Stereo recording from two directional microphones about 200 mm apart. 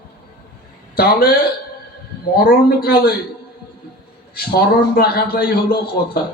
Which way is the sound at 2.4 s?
50° left (ahead or behind).